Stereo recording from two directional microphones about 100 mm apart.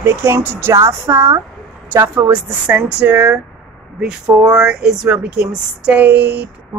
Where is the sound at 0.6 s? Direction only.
25° right (ahead or behind).